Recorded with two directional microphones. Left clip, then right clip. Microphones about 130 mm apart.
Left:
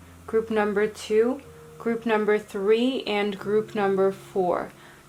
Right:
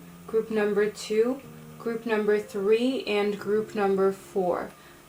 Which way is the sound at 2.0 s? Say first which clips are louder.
Left 2 dB; 25° left (ahead or behind).